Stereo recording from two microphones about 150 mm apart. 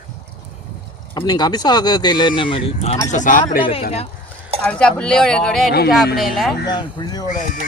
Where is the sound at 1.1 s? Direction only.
25° left (ahead or behind).